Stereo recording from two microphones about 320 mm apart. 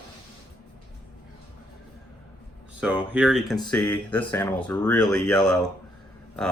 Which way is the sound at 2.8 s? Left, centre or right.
Centre.